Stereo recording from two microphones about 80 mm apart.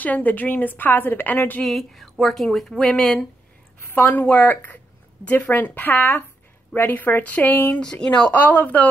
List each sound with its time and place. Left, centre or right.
0.0 s a woman's voice: centre
1.6 s a woman's voice: centre
3.9 s a woman's voice: left
7.8 s speech: centre
8.3 s a woman's voice: left